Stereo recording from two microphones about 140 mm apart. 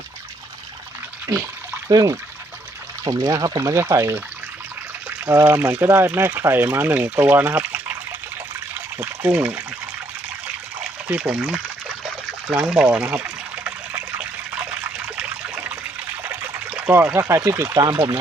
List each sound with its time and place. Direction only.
1.9 s speech: 25° right (ahead or behind)
9.0 s speech: 10° right (ahead or behind)
11.1 s speech: 5° right (ahead or behind)
13.7 s water: 10° right (ahead or behind)
17.7 s speech: 30° right (ahead or behind)